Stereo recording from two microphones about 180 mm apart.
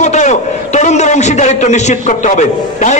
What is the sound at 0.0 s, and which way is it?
A man's voice, 40° left (ahead or behind).